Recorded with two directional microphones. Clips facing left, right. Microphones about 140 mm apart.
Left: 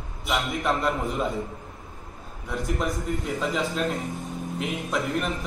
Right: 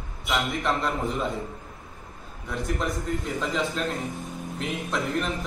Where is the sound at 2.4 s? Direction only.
Centre (ahead or behind).